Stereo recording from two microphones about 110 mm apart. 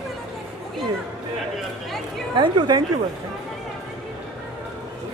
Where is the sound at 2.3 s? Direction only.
45° right (ahead or behind).